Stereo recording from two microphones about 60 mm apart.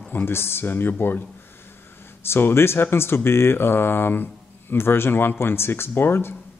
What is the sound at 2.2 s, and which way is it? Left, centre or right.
Speech, left.